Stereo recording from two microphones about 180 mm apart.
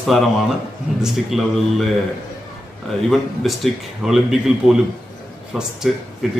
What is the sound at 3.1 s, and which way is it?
A man's voice, centre (ahead or behind).